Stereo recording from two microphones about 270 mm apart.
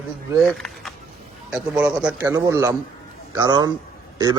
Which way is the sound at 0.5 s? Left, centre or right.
Centre.